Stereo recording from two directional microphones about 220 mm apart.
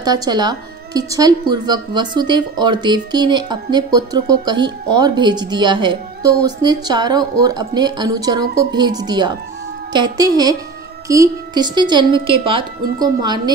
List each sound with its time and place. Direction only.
0.0 s a woman's voice: 15° right (ahead or behind)